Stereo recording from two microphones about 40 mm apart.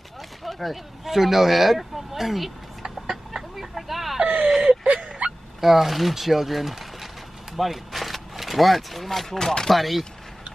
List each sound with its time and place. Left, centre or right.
0.4 s speech: centre
2.8 s chicken: centre
3.5 s vehicle: centre
4.8 s a sound: right
5.6 s speech: centre
9.4 s chopping: centre
9.7 s speech: centre